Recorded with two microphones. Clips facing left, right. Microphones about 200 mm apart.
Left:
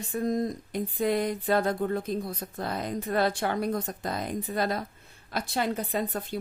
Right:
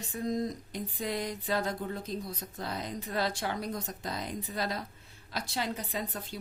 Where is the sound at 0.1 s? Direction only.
55° left (ahead or behind).